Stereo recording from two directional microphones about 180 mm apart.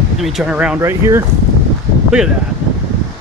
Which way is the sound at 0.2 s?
Centre (ahead or behind).